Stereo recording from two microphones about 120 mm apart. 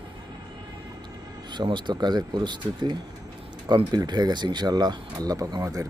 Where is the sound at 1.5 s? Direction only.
40° right (ahead or behind).